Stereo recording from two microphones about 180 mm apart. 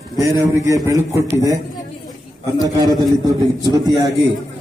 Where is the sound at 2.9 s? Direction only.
20° right (ahead or behind).